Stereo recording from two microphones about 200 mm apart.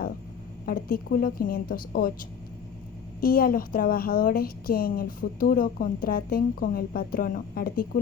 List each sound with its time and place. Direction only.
0.6 s a woman's voice: 45° left (ahead or behind)
3.2 s a woman's voice: 50° left (ahead or behind)